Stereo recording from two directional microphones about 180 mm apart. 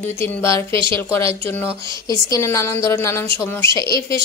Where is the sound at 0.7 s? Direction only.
30° right (ahead or behind).